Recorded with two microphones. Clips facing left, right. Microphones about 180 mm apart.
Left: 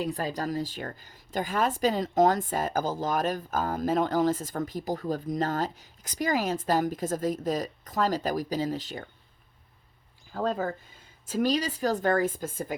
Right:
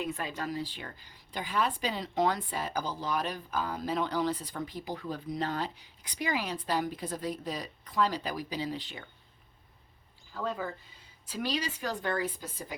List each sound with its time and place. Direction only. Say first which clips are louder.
0.0 s speech: left 5 dB; 35° left (ahead or behind)
10.3 s speech: left 6 dB; 45° left (ahead or behind)